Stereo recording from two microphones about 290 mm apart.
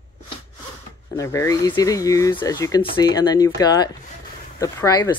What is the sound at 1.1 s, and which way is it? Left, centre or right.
Speech, centre.